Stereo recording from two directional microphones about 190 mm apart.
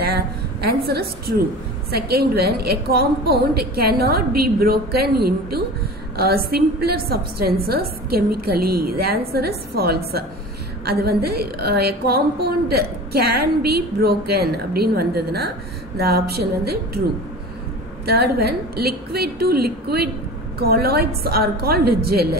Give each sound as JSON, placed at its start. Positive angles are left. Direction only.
{"t": 0.0, "sound": "a sound", "side_deg": -55}
{"t": 1.9, "sound": "a woman's voice", "side_deg": -55}
{"t": 18.0, "sound": "a woman's voice", "side_deg": -55}